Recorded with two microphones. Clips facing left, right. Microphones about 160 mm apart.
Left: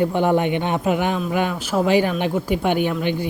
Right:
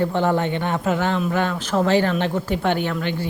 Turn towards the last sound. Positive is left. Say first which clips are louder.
# left 3 dB
turn(degrees=15)  # may be behind; listen again after turning